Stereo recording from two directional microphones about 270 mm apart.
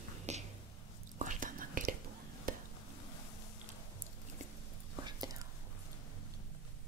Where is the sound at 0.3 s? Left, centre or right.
Right.